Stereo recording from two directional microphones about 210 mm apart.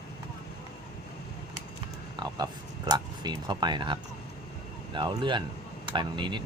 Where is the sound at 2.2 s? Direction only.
20° right (ahead or behind).